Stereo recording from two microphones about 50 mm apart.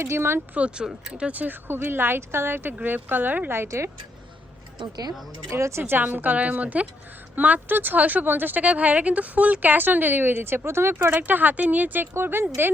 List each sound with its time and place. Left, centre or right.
0.0 s speech: right
0.8 s speech: centre
1.2 s speech: right
1.6 s speech: right
2.8 s speech: right
3.5 s speech: right
5.5 s speech: right
5.8 s speech: right
8.6 s speech: right
11.3 s speech: right
12.1 s speech: right